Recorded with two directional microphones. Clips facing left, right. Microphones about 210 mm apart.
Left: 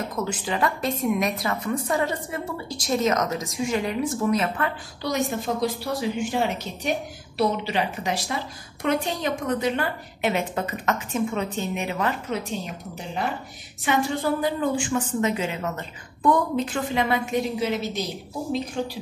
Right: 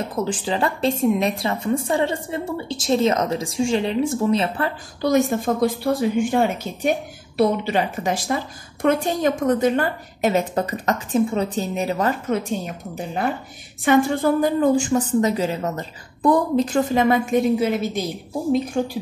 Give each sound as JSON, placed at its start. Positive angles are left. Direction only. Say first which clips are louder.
{"t": 0.1, "sound": "a woman's voice", "louder": "right 4 dB", "side_deg": -30}
{"t": 5.0, "sound": "a woman's voice", "louder": "right 7 dB", "side_deg": -50}